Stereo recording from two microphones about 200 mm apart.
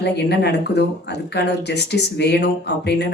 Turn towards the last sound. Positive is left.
turn(degrees=60)  # may be behind; listen again after turning